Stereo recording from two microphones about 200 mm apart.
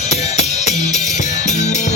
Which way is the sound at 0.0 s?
35° left (ahead or behind).